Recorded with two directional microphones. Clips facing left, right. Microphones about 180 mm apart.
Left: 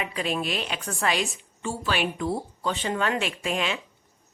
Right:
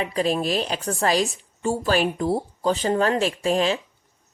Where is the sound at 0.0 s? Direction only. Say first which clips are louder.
Right 6 dB; 35° right (ahead or behind).